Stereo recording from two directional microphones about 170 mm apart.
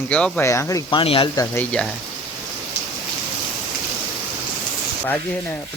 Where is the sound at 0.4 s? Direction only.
15° left (ahead or behind).